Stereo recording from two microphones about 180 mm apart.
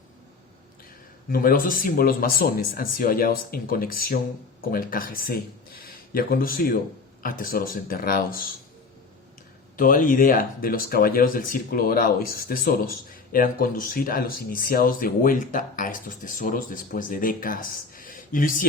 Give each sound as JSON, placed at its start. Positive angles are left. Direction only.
{"t": 1.3, "sound": "speech", "side_deg": 50}
{"t": 9.7, "sound": "speech", "side_deg": 50}